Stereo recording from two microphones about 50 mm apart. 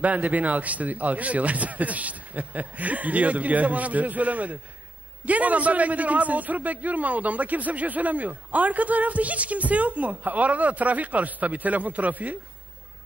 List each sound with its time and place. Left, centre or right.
0.0 s a man's voice: right